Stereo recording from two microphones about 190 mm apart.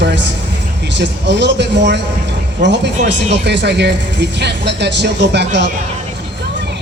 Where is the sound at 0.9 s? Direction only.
65° right (ahead or behind).